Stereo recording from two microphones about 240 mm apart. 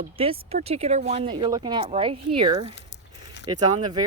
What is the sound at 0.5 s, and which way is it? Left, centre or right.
Speech, right.